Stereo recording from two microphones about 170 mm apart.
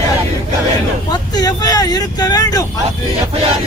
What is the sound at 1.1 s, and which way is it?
Speech, 25° left (ahead or behind).